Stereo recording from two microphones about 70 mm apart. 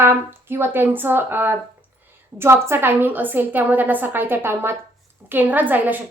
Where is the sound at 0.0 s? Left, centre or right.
Right.